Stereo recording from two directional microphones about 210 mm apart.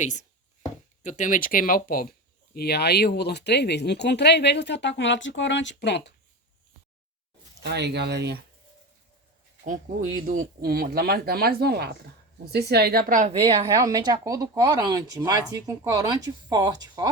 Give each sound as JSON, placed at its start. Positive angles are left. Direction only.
{"t": 0.0, "sound": "speech", "side_deg": 35}
{"t": 7.6, "sound": "speech", "side_deg": -55}
{"t": 9.6, "sound": "speech", "side_deg": -40}
{"t": 13.4, "sound": "speech", "side_deg": -20}